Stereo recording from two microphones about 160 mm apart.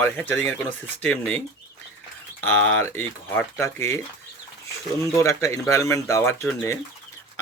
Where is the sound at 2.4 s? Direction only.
10° left (ahead or behind).